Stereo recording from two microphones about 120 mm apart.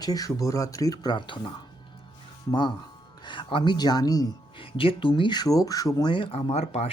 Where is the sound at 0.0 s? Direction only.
30° left (ahead or behind).